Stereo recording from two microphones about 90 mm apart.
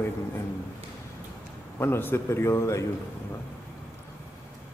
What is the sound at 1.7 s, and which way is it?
Speech, 30° left (ahead or behind).